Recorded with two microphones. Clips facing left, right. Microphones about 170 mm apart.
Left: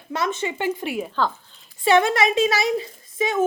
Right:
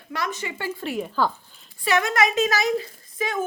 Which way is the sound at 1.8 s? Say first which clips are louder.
Left 4 dB; 30° left (ahead or behind).